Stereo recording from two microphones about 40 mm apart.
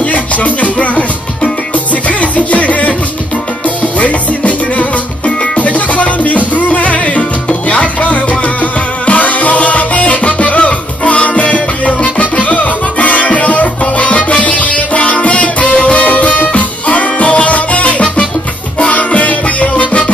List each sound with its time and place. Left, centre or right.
0.0 s music: left
7.4 s salsa music: left
9.0 s music: left